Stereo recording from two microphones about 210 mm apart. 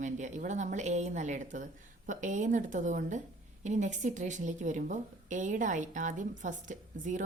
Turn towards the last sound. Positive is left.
turn(degrees=-35)  # may be behind; listen again after turning